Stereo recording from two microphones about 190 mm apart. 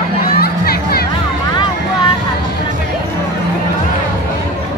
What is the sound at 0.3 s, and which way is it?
Music, 55° left (ahead or behind).